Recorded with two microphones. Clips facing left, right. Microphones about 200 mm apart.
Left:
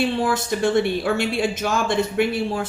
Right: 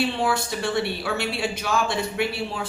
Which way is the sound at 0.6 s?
50° left (ahead or behind).